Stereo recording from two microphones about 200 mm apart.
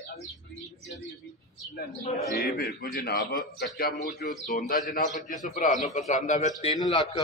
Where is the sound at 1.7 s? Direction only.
50° left (ahead or behind).